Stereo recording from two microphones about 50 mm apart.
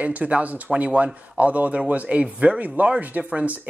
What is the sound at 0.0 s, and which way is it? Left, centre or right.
Speech, right.